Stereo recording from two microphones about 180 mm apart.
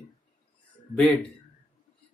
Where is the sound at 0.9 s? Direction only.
5° left (ahead or behind).